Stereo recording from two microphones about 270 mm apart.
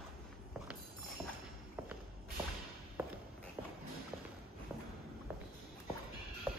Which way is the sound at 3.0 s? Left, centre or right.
Centre.